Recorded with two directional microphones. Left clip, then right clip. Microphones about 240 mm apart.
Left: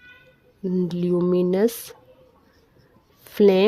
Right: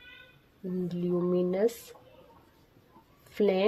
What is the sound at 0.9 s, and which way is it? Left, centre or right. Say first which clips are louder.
Speech: left 6 dB; left.